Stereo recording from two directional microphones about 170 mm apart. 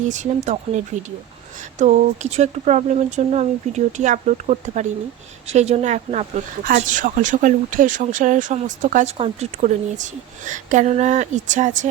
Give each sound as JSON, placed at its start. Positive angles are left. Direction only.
{"t": 0.1, "sound": "speech", "side_deg": -45}
{"t": 1.8, "sound": "speech", "side_deg": -45}